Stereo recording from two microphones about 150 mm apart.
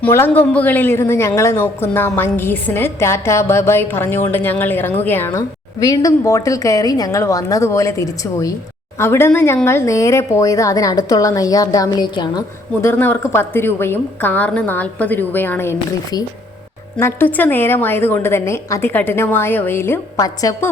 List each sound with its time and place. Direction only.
0.0 s speech: 15° left (ahead or behind)
17.0 s speech: 15° left (ahead or behind)